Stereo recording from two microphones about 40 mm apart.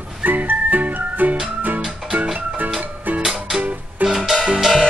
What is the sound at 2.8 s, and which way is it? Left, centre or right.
Music, right.